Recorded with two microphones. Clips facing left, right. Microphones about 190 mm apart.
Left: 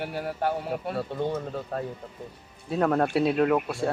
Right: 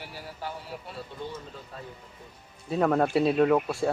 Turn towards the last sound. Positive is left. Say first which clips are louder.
# right 1 dB
turn(degrees=0)  # may be behind; listen again after turning